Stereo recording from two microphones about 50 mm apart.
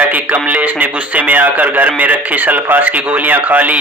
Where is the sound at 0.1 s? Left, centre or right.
Right.